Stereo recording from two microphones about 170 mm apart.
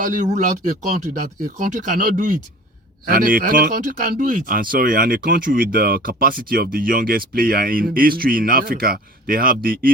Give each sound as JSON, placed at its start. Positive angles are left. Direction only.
{"t": 0.0, "sound": "speech", "side_deg": -50}